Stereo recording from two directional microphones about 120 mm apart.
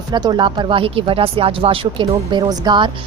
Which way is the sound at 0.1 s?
35° right (ahead or behind).